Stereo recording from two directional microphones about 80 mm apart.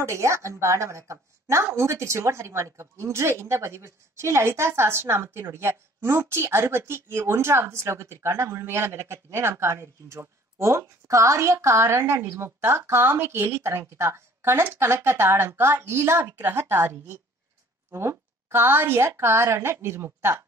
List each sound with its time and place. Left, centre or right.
0.0 s a woman's voice: right